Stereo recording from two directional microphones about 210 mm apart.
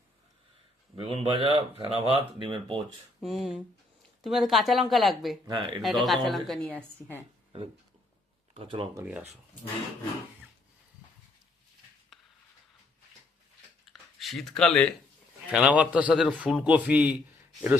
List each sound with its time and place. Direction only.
0.9 s speech: 25° right (ahead or behind)
3.2 s speech: centre (ahead or behind)
5.5 s speech: 25° right (ahead or behind)
5.8 s speech: centre (ahead or behind)
8.5 s speech: 25° right (ahead or behind)
12.1 s a sound: centre (ahead or behind)
14.2 s a man's voice: centre (ahead or behind)